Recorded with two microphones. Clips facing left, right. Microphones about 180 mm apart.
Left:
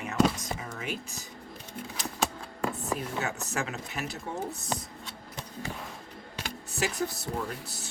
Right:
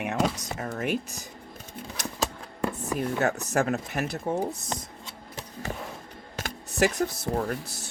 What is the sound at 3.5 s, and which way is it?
Speech, 50° right (ahead or behind).